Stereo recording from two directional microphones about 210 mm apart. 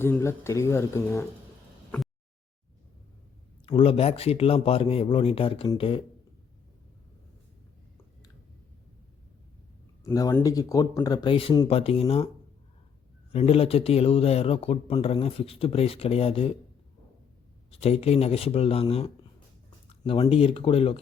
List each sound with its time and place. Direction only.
0.0 s speech: 10° left (ahead or behind)
3.7 s speech: 25° left (ahead or behind)
10.0 s speech: 15° left (ahead or behind)
13.3 s speech: 30° left (ahead or behind)
17.7 s speech: 30° left (ahead or behind)
20.2 s speech: 25° left (ahead or behind)